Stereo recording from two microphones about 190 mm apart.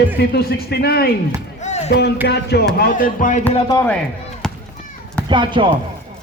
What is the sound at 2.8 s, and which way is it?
Speech, 50° left (ahead or behind).